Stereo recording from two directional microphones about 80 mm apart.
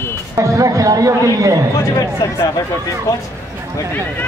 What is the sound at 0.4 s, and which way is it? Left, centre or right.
Speech, right.